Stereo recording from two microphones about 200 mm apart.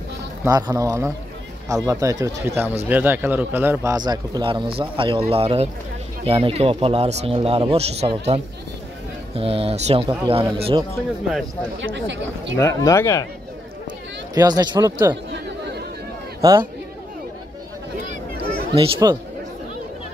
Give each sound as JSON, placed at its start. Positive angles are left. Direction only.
{"t": 0.5, "sound": "speech", "side_deg": -20}
{"t": 9.4, "sound": "speech", "side_deg": -30}
{"t": 11.8, "sound": "speech", "side_deg": -65}
{"t": 12.5, "sound": "speech", "side_deg": 15}
{"t": 14.3, "sound": "speech", "side_deg": -20}
{"t": 16.3, "sound": "a man's voice", "side_deg": -15}
{"t": 18.8, "sound": "speech", "side_deg": -20}